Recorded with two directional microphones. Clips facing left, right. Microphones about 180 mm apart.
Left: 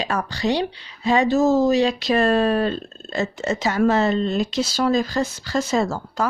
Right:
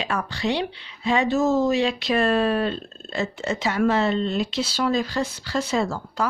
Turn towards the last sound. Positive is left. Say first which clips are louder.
# left 3 dB
turn(degrees=45)  # may be behind; listen again after turning